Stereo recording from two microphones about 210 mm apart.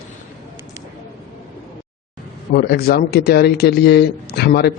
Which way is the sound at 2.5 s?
50° left (ahead or behind).